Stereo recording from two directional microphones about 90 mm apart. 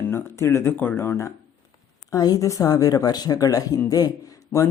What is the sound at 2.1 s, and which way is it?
Speech, 40° left (ahead or behind).